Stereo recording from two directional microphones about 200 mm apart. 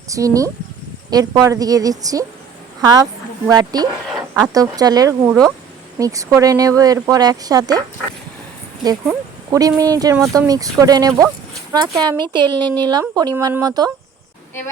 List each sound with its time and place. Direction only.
0.1 s speech: 15° right (ahead or behind)
9.5 s speech: 15° right (ahead or behind)